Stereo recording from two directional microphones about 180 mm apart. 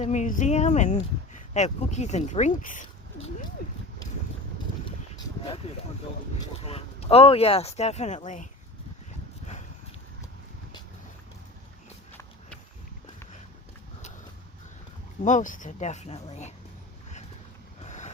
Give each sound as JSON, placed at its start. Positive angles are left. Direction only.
{"t": 0.0, "sound": "speech", "side_deg": 40}
{"t": 6.3, "sound": "speech", "side_deg": 35}
{"t": 15.2, "sound": "speech", "side_deg": 45}
{"t": 17.8, "sound": "vehicle", "side_deg": 40}